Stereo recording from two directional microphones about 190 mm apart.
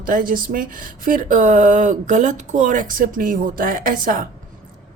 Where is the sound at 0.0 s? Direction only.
45° right (ahead or behind).